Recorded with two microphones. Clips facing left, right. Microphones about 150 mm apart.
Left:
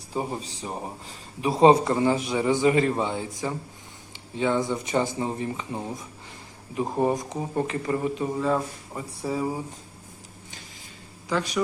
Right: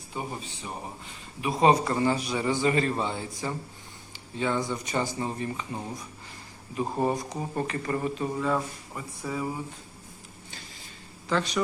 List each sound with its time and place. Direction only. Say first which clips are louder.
0.1 s a man's voice: left 5 dB; 35° left (ahead or behind)
1.9 s speech: left 3 dB; 15° left (ahead or behind)
11.3 s speech: left 1 dB; 10° left (ahead or behind)